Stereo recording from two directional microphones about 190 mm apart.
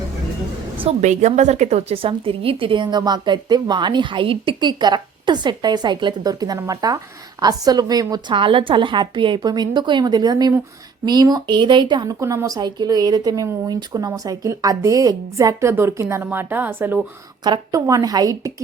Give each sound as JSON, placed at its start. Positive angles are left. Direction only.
{"t": 0.8, "sound": "a woman's voice", "side_deg": -35}
{"t": 17.4, "sound": "a woman's voice", "side_deg": -20}